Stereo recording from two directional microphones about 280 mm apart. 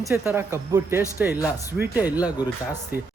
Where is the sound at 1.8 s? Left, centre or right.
Centre.